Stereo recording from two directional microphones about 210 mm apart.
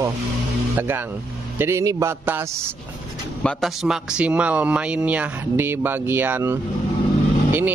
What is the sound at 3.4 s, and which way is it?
Speech, 5° left (ahead or behind).